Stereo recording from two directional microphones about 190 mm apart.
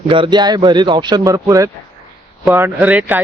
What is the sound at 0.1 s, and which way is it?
Speech, 25° right (ahead or behind).